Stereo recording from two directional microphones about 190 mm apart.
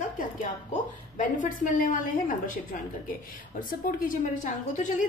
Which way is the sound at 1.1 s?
45° left (ahead or behind).